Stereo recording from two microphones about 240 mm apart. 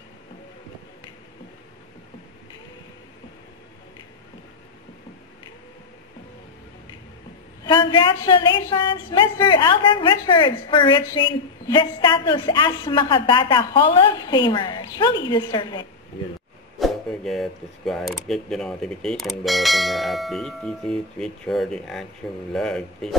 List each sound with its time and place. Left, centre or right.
7.6 s a woman's voice: centre
16.7 s speech: centre